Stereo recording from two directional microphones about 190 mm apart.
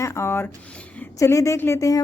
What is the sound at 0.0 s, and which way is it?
A woman's voice, 15° left (ahead or behind).